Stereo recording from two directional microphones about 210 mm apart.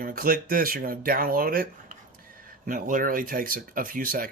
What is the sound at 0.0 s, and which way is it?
Speech, 40° right (ahead or behind).